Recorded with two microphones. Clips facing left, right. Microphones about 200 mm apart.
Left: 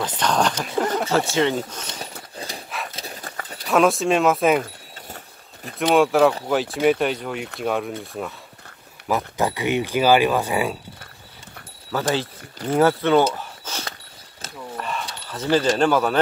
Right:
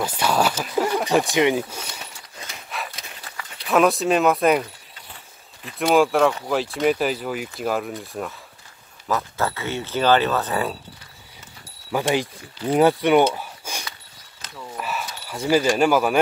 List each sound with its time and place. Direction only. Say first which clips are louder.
0.2 s speech: even; 10° right (ahead or behind)
2.3 s horse: left 6 dB; 35° left (ahead or behind)
3.0 s clip-clop: left 5 dB; 40° left (ahead or behind)
3.6 s speech: even; centre (ahead or behind)
5.1 s vehicle: left 5 dB; 45° left (ahead or behind)
5.8 s speech: left 1 dB; centre (ahead or behind)
9.0 s speech: left 2 dB; 15° left (ahead or behind)
11.9 s speech: right 1 dB; 15° right (ahead or behind)
14.8 s a sound: right 1 dB; 5° right (ahead or behind)